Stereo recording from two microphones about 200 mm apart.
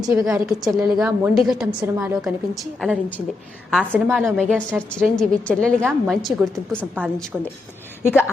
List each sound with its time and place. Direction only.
0.0 s a woman's voice: 15° right (ahead or behind)
0.3 s a woman's voice: 5° right (ahead or behind)